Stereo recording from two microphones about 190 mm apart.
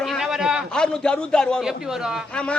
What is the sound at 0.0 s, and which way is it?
A man's voice, centre (ahead or behind).